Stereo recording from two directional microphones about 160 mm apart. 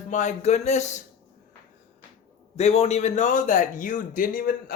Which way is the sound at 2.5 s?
40° left (ahead or behind).